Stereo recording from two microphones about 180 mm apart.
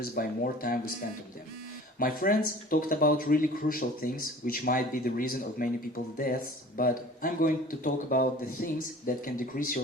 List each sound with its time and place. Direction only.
0.0 s speech: 55° left (ahead or behind)
2.0 s a man's voice: 50° left (ahead or behind)